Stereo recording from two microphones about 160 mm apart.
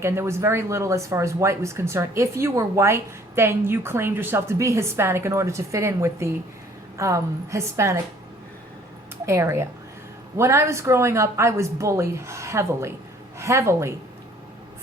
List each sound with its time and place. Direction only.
0.0 s a woman's voice: 15° right (ahead or behind)
9.2 s speech: 15° right (ahead or behind)